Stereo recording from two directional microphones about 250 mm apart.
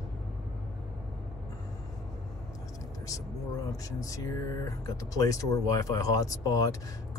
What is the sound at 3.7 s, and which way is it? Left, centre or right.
Speech, centre.